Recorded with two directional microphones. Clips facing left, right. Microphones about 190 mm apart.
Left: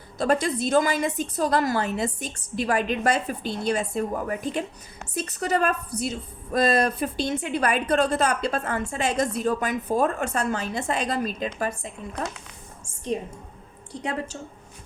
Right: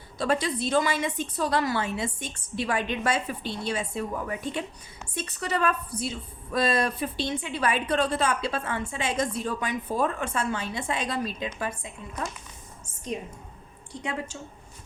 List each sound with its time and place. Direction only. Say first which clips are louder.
0.2 s a woman's voice: left 3 dB; 45° left (ahead or behind)
13.9 s a woman's voice: left 3 dB; 35° left (ahead or behind)